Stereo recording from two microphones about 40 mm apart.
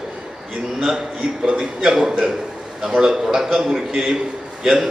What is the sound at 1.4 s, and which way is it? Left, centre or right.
Speech, right.